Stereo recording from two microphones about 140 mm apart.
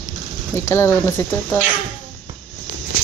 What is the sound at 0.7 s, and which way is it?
Speech, 20° left (ahead or behind).